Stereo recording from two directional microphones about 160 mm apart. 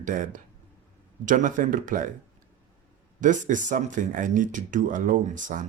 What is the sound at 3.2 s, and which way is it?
Speech, 50° right (ahead or behind).